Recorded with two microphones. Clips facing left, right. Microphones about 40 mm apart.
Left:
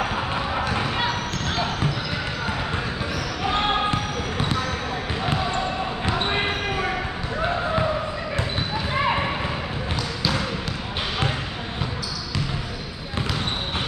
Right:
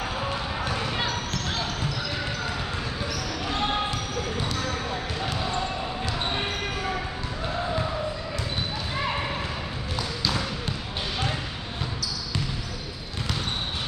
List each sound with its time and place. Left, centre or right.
0.0 s basketball bounce: left
3.4 s basketball bounce: left
6.0 s basketball bounce: left
8.9 s basketball bounce: left